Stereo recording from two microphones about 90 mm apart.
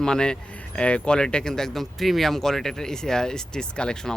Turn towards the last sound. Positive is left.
turn(degrees=10)  # may be behind; listen again after turning